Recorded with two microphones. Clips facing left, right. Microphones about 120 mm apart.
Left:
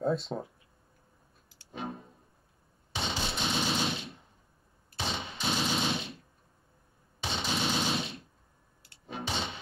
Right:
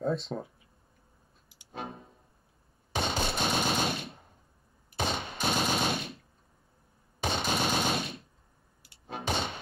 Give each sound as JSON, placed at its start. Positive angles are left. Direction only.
{"t": 0.0, "sound": "speech", "side_deg": 0}
{"t": 2.9, "sound": "machine gun", "side_deg": -55}
{"t": 5.0, "sound": "gunshot", "side_deg": -50}
{"t": 5.3, "sound": "machine gun", "side_deg": -55}
{"t": 7.2, "sound": "machine gun", "side_deg": -50}
{"t": 9.0, "sound": "a sound", "side_deg": -50}